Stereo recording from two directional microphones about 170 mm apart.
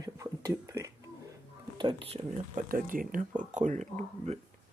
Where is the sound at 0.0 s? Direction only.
20° right (ahead or behind).